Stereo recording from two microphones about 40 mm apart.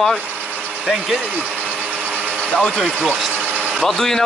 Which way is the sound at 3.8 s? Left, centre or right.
Centre.